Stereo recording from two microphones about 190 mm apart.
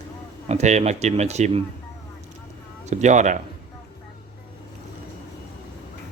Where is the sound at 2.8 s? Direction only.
40° right (ahead or behind).